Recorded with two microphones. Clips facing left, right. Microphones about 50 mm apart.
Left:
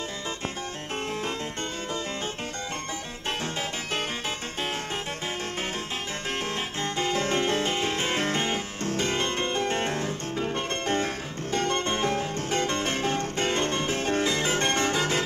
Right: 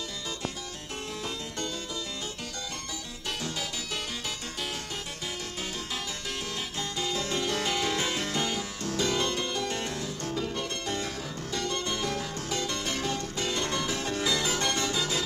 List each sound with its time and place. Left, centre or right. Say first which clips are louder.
6.8 s music: left 5 dB; left